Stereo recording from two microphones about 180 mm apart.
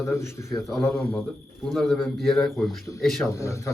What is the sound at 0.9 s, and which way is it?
Speech, 30° left (ahead or behind).